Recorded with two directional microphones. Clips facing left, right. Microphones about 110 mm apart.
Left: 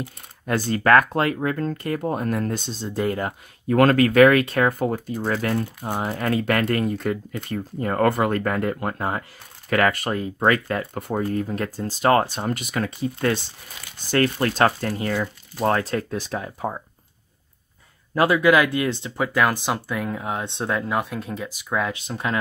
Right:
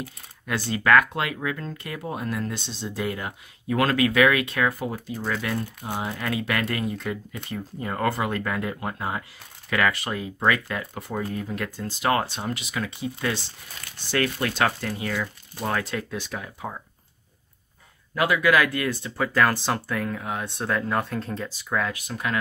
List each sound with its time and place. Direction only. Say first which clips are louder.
0.5 s speech: left 3 dB; 45° left (ahead or behind)
5.2 s speech: left 4 dB; 40° left (ahead or behind)
12.4 s speech: left 4 dB; 50° left (ahead or behind)
18.1 s speech: left 4 dB; 30° left (ahead or behind)